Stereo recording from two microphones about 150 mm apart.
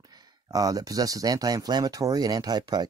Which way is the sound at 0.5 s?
25° right (ahead or behind).